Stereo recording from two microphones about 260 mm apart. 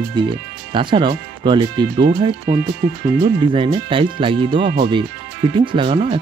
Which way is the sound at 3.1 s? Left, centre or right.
Right.